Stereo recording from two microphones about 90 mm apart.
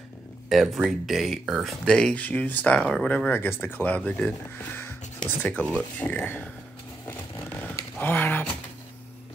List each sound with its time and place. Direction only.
0.5 s speech: centre (ahead or behind)
2.0 s speech: 15° left (ahead or behind)
7.6 s a sound: 20° left (ahead or behind)